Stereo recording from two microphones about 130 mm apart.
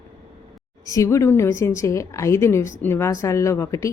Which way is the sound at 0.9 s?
25° left (ahead or behind).